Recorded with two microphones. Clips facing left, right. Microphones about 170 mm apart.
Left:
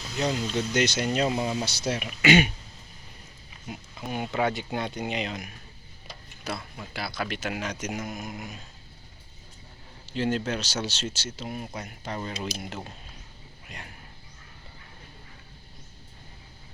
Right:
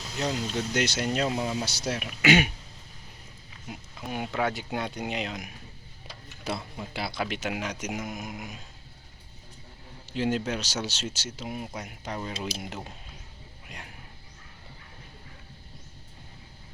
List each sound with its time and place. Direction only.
0.2 s speech: centre (ahead or behind)
3.7 s speech: centre (ahead or behind)
6.4 s speech: 20° right (ahead or behind)
10.2 s speech: 10° right (ahead or behind)